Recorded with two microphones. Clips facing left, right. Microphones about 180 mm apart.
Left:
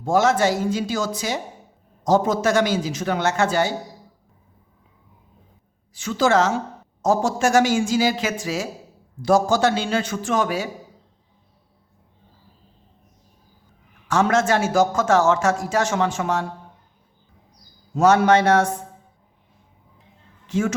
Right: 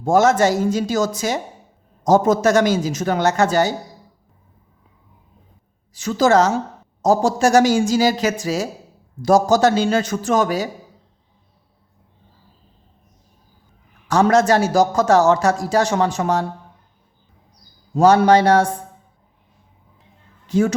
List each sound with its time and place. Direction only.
0.0 s speech: 45° right (ahead or behind)
5.9 s a man's voice: 40° right (ahead or behind)
14.1 s a man's voice: 35° right (ahead or behind)
17.9 s a man's voice: 35° right (ahead or behind)
20.5 s a man's voice: 35° right (ahead or behind)